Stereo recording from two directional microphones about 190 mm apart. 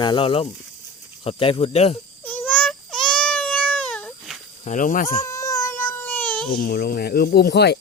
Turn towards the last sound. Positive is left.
turn(degrees=60)  # may be behind; listen again after turning